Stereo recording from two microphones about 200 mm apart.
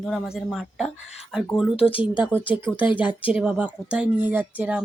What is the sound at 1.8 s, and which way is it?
Speech, 25° left (ahead or behind).